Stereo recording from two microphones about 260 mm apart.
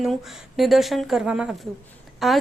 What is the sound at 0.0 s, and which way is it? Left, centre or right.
A woman's voice, centre.